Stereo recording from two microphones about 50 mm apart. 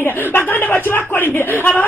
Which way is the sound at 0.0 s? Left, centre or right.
Left.